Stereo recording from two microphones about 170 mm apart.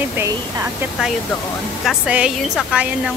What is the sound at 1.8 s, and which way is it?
A woman's voice, 5° right (ahead or behind).